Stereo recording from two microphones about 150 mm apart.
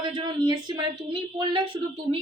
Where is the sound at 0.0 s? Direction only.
30° right (ahead or behind).